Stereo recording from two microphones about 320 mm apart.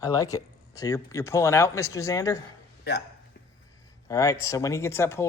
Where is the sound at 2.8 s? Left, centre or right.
Left.